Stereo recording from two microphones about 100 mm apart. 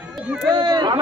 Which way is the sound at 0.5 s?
45° right (ahead or behind).